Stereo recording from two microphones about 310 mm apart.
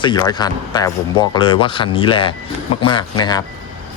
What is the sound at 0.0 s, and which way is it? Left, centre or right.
Speech, centre.